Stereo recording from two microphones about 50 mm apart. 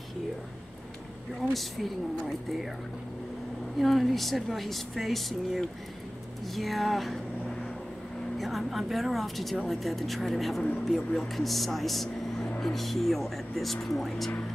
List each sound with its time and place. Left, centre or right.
1.5 s speech: centre
3.8 s speech: centre